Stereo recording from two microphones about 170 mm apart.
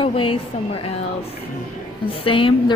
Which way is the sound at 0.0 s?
30° left (ahead or behind).